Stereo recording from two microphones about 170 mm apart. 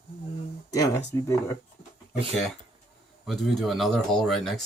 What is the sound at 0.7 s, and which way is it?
Speech, 20° left (ahead or behind).